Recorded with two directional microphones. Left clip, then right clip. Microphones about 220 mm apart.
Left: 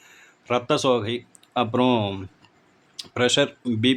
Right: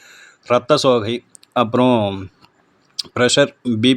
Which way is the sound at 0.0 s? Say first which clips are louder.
Right 7 dB; 20° right (ahead or behind).